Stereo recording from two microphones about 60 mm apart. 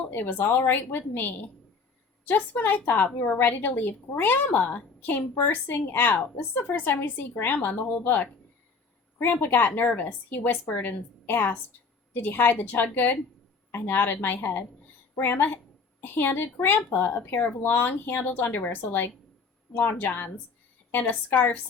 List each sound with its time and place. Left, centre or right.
0.1 s a woman's voice: left
9.4 s a woman's voice: left
13.7 s a woman's voice: left
19.7 s a woman's voice: centre
20.1 s a woman's voice: left